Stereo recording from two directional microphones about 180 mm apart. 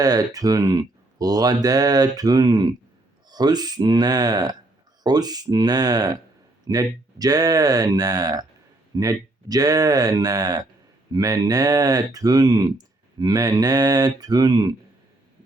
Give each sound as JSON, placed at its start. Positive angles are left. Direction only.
{"t": 0.0, "sound": "speech", "side_deg": -20}